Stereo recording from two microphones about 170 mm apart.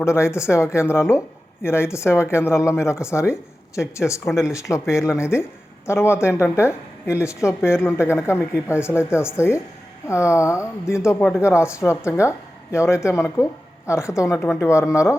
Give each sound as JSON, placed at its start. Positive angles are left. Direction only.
{"t": 0.0, "sound": "speech", "side_deg": 15}